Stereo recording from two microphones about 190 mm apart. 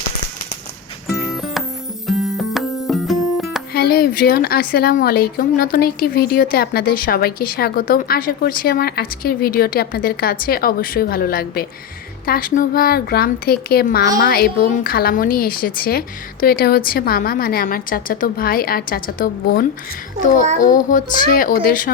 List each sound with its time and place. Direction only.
1.1 s music: centre (ahead or behind)
3.7 s speech: 55° left (ahead or behind)